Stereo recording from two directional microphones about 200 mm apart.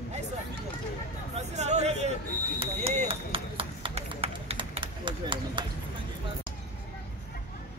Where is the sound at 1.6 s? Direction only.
35° right (ahead or behind).